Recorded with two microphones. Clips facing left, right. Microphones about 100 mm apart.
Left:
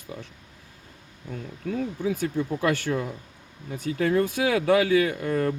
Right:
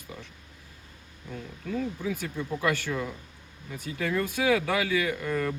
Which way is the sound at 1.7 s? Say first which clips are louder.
Left 3 dB; 45° left (ahead or behind).